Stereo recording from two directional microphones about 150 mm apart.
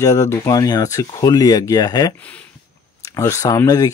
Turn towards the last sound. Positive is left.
turn(degrees=25)  # may be behind; listen again after turning